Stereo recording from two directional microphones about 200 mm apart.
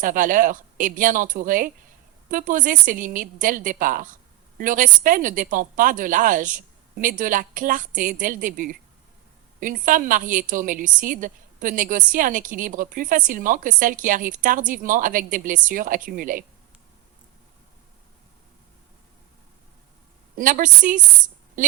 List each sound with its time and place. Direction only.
0.0 s a woman's voice: 40° right (ahead or behind)
20.3 s speech: 40° right (ahead or behind)